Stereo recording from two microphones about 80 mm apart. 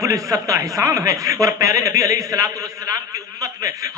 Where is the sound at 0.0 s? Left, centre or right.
Right.